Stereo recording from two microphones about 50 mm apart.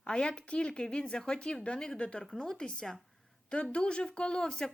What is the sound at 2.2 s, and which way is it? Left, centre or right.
Speech, centre.